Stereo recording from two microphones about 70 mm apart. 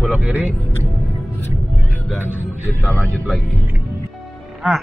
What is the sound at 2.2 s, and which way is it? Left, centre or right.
Music, right.